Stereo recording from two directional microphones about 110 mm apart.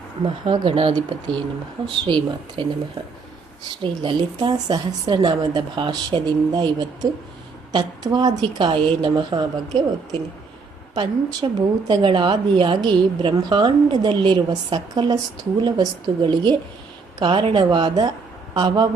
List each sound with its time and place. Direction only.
0.4 s a woman's voice: 55° right (ahead or behind)
3.7 s a woman's voice: 45° right (ahead or behind)